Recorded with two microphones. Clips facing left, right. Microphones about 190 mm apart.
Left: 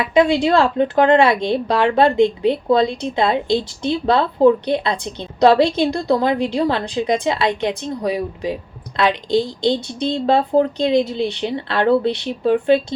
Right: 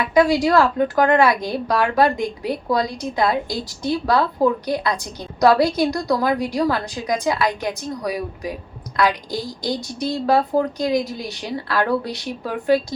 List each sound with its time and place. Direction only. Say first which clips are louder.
0.0 s speech: left 1 dB; 25° left (ahead or behind)